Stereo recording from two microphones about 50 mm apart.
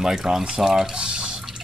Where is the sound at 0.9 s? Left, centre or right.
Centre.